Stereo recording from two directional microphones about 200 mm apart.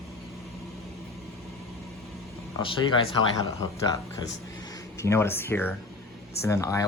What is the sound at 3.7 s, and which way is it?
Speech, 20° left (ahead or behind).